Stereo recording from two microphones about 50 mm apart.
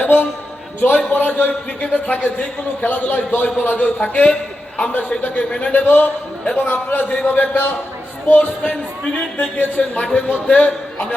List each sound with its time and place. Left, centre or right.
0.0 s a sound: left
0.8 s a man's voice: left
5.7 s a man's voice: left
9.9 s speech: left